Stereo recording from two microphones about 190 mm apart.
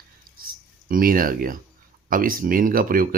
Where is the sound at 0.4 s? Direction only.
50° right (ahead or behind).